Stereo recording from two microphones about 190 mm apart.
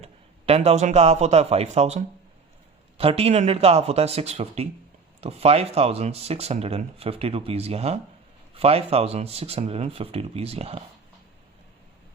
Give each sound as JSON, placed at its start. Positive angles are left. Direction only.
{"t": 0.0, "sound": "speech", "side_deg": -30}